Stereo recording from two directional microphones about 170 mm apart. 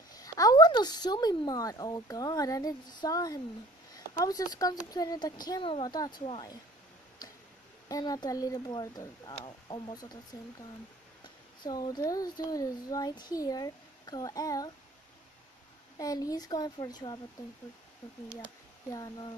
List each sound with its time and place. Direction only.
0.1 s a child's voice: 20° left (ahead or behind)
7.9 s a child's voice: 25° left (ahead or behind)
11.6 s a child's voice: 25° left (ahead or behind)
16.0 s a child's voice: 20° left (ahead or behind)
18.9 s a child's voice: 25° left (ahead or behind)